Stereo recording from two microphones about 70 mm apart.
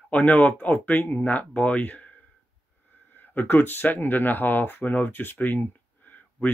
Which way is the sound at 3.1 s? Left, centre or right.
Left.